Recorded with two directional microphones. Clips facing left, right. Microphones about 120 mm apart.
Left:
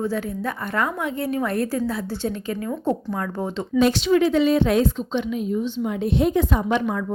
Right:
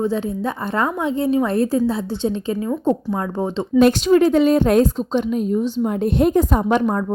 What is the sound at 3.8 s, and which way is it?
A woman's voice, 50° right (ahead or behind).